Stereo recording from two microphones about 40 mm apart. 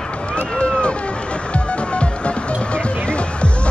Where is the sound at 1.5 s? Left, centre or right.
Left.